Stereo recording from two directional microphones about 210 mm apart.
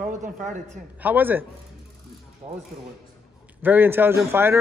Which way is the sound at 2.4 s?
25° right (ahead or behind).